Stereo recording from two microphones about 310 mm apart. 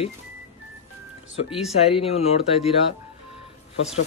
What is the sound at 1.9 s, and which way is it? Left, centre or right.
Speech, centre.